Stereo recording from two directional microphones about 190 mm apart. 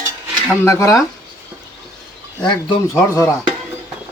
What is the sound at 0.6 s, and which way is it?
Speech, 15° left (ahead or behind).